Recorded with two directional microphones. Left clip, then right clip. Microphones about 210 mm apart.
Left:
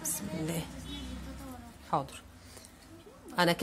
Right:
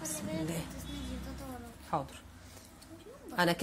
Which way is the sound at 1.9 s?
20° left (ahead or behind).